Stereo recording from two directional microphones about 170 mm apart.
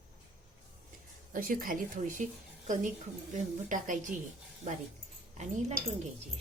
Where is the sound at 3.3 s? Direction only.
50° right (ahead or behind).